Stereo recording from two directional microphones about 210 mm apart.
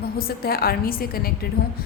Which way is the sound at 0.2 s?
45° left (ahead or behind).